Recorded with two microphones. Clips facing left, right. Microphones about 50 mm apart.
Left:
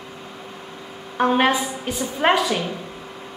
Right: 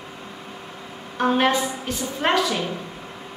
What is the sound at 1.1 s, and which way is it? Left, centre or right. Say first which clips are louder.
A woman's voice: left 2 dB; centre.